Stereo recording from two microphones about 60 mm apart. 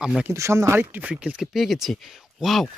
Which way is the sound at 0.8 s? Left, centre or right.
Right.